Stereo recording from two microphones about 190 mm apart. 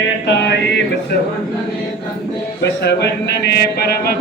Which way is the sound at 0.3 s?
60° left (ahead or behind).